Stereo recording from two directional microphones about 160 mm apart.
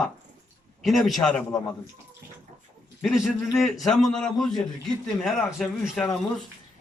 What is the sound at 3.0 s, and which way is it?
A man's voice, centre (ahead or behind).